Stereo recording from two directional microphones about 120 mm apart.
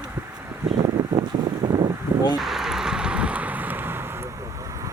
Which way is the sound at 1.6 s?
30° right (ahead or behind).